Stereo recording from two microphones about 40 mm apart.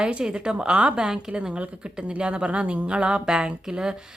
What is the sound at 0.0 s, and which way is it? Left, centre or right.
A woman's voice, right.